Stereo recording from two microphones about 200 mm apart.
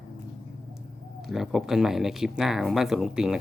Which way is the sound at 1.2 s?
Centre (ahead or behind).